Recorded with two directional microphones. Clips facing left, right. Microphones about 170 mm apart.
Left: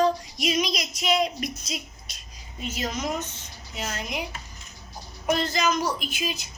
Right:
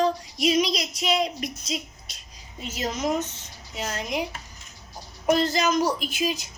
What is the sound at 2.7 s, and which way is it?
Speech, 40° right (ahead or behind).